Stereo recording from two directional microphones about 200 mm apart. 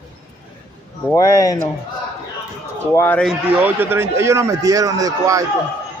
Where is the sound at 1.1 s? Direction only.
15° left (ahead or behind).